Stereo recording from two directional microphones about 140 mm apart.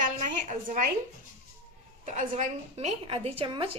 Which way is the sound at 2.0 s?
60° right (ahead or behind).